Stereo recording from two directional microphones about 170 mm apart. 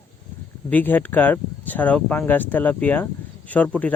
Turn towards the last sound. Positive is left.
turn(degrees=10)  # may be behind; listen again after turning